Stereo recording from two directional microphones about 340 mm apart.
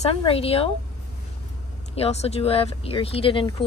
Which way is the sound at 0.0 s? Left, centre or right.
Centre.